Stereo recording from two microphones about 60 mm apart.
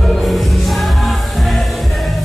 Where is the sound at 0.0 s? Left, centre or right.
Centre.